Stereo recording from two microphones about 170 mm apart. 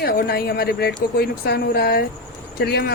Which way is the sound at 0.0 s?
65° left (ahead or behind).